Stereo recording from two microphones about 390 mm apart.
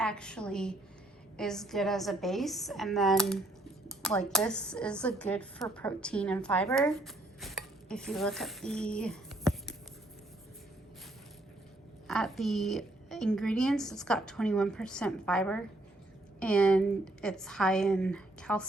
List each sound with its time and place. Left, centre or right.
0.0 s a woman's voice: centre
12.0 s a woman's voice: centre